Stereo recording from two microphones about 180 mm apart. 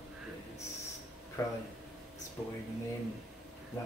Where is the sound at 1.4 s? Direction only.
20° left (ahead or behind).